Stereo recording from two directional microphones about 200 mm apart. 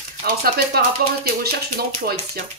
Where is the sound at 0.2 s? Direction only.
50° right (ahead or behind).